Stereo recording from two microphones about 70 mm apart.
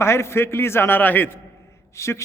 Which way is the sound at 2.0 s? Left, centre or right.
Left.